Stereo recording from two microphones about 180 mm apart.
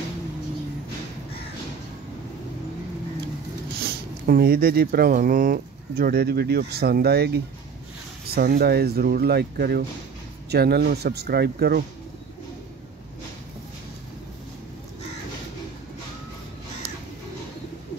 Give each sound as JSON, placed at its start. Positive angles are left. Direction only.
{"t": 3.8, "sound": "speech", "side_deg": -55}